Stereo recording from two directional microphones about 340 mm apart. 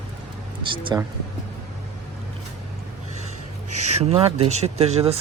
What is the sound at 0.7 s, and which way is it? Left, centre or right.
Speech, centre.